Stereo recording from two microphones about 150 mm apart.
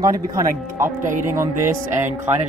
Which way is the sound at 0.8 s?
60° right (ahead or behind).